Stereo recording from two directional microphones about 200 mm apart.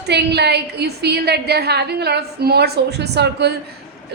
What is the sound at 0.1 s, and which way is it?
A woman's voice, 55° right (ahead or behind).